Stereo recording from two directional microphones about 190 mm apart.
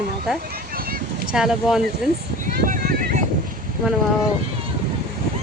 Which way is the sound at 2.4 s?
45° right (ahead or behind).